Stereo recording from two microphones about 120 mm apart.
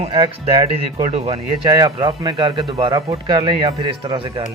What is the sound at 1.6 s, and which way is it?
Speech, 35° right (ahead or behind).